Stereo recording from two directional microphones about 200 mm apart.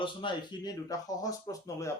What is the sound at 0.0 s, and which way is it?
Speech, 25° left (ahead or behind).